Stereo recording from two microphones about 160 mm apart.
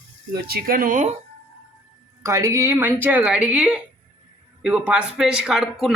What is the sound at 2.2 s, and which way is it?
Speech, 20° right (ahead or behind).